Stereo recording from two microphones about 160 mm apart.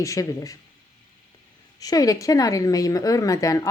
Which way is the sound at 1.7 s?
20° left (ahead or behind).